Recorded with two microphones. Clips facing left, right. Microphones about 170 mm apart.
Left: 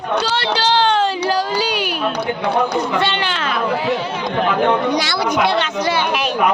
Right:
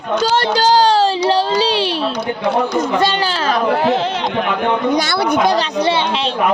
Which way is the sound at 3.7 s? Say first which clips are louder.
Right 4 dB; 60° right (ahead or behind).